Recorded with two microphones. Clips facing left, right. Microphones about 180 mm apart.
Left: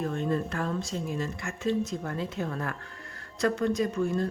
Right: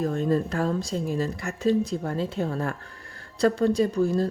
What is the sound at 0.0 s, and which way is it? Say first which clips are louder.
Speech: right 5 dB; 35° right (ahead or behind).